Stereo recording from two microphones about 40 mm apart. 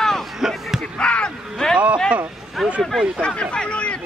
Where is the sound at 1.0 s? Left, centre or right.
Left.